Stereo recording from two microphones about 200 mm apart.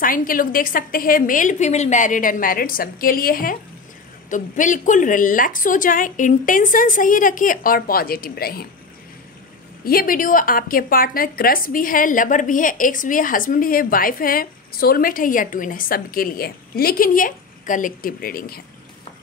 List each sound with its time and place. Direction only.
0.0 s a woman's voice: 45° left (ahead or behind)
9.8 s a woman's voice: 45° left (ahead or behind)